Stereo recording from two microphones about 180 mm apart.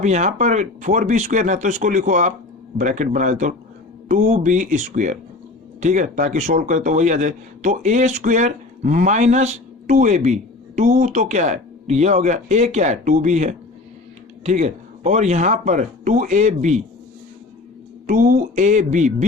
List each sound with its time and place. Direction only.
0.0 s speech: 40° right (ahead or behind)
18.0 s speech: 50° right (ahead or behind)